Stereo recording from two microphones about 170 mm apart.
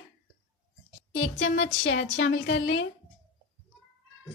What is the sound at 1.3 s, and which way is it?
A woman's voice, 90° left.